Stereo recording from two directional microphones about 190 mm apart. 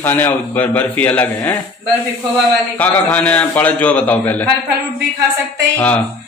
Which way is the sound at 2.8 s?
10° left (ahead or behind).